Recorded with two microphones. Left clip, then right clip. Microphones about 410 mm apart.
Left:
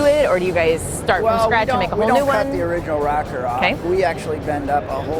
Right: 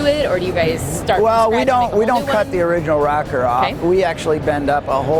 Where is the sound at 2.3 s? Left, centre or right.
Right.